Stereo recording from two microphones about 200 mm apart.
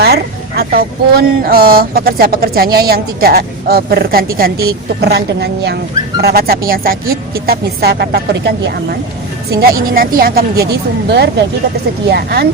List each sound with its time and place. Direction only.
0.0 s a woman's voice: 50° right (ahead or behind)